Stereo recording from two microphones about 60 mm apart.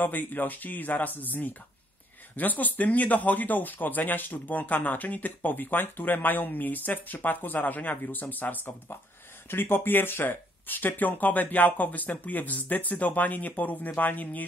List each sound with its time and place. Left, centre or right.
0.0 s speech: left